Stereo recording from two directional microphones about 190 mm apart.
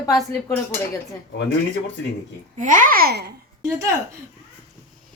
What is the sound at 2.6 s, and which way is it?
Speech, 45° right (ahead or behind).